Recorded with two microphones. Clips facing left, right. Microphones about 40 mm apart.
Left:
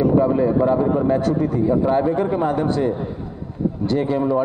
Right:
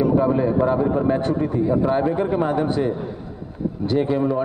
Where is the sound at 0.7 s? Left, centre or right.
Centre.